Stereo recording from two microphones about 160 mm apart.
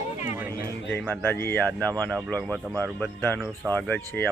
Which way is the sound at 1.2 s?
15° left (ahead or behind).